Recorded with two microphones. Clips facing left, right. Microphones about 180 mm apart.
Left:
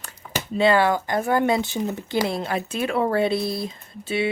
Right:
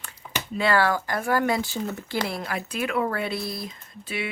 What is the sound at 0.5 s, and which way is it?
Speech, 20° left (ahead or behind).